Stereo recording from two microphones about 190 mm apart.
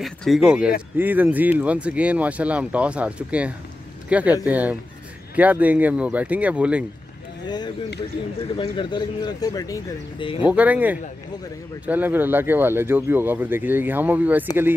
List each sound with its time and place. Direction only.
0.0 s speech: centre (ahead or behind)
7.4 s speech: 20° left (ahead or behind)
10.4 s speech: 10° right (ahead or behind)